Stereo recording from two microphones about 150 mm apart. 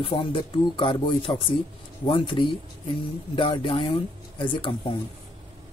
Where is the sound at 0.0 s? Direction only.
35° left (ahead or behind).